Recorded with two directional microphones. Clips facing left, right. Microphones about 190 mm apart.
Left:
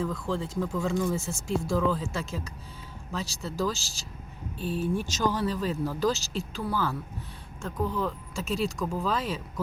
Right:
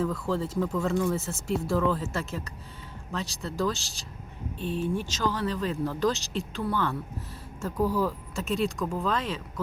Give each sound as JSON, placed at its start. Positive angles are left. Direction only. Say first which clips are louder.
{"t": 0.0, "sound": "speech", "louder": "right 2 dB", "side_deg": -5}